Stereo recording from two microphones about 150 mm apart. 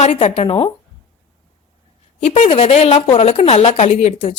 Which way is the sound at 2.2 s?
45° left (ahead or behind).